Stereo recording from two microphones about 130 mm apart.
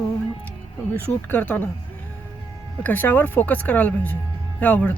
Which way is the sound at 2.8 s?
15° left (ahead or behind).